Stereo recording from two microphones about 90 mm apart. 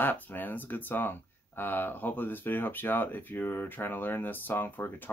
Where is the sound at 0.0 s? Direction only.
20° left (ahead or behind).